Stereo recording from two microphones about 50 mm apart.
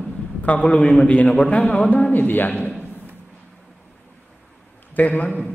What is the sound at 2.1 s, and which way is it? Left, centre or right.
Speech, left.